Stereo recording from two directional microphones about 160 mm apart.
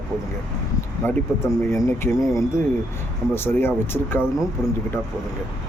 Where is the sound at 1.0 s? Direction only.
15° left (ahead or behind).